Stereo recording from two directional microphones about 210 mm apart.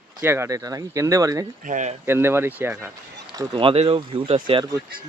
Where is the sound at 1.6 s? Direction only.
35° right (ahead or behind).